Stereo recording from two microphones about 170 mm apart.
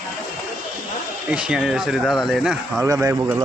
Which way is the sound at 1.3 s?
5° right (ahead or behind).